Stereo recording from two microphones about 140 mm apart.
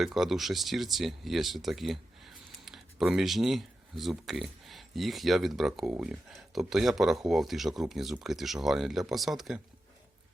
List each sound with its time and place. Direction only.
0.0 s speech: centre (ahead or behind)